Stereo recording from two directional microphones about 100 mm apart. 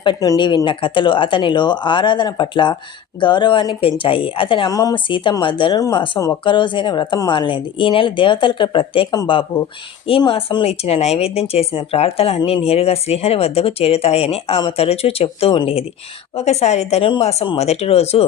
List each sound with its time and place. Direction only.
0.0 s speech: 55° left (ahead or behind)
4.7 s speech: 35° left (ahead or behind)
5.0 s speech: 55° left (ahead or behind); by 14.6 s 80° left
14.8 s a woman's voice: 90° left